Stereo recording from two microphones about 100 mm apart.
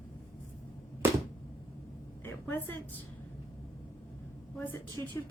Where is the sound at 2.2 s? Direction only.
20° left (ahead or behind).